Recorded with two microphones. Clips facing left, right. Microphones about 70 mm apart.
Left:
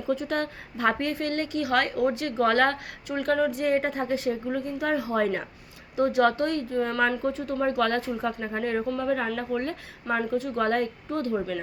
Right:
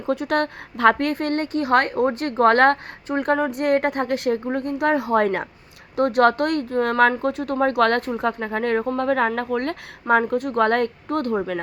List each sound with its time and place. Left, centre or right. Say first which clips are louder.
0.1 s a woman's voice: right 6 dB; right
3.1 s speech: right 4 dB; right
3.5 s a woman's voice: right 5 dB; right
7.2 s a woman's voice: right 5 dB; right